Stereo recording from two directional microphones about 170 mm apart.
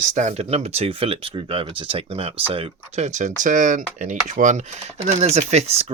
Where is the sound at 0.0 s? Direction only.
45° right (ahead or behind).